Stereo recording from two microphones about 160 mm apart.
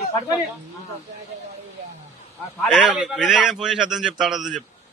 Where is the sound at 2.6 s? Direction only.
5° right (ahead or behind).